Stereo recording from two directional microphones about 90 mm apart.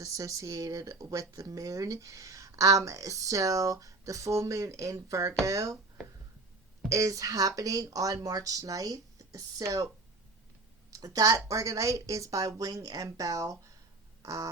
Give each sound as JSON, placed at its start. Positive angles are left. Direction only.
{"t": 0.0, "sound": "speech", "side_deg": -35}
{"t": 6.8, "sound": "speech", "side_deg": -35}
{"t": 10.9, "sound": "speech", "side_deg": -40}
{"t": 14.2, "sound": "a sound", "side_deg": -35}